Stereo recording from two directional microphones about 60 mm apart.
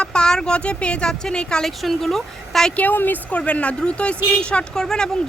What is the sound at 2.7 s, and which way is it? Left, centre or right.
A woman's voice, left.